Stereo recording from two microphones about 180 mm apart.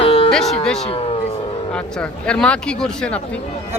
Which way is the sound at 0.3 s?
5° left (ahead or behind).